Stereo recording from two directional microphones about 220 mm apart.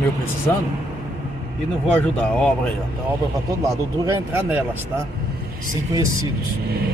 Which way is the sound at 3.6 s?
15° right (ahead or behind).